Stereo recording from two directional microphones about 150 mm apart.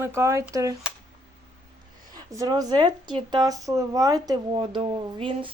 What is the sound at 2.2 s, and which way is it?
Speech, 25° right (ahead or behind).